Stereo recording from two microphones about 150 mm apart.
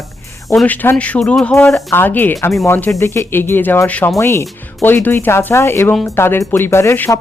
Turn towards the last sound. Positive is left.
turn(degrees=15)  # may be behind; listen again after turning